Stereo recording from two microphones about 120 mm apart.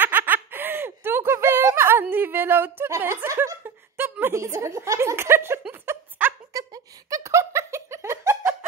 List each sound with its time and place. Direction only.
0.0 s snicker: 15° right (ahead or behind)
5.7 s a sound: 15° right (ahead or behind)
6.5 s laughter: 30° right (ahead or behind)